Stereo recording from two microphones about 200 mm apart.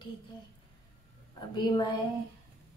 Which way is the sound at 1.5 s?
20° left (ahead or behind).